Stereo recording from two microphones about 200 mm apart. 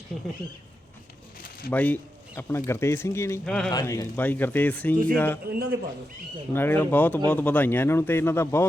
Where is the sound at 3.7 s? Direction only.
20° left (ahead or behind).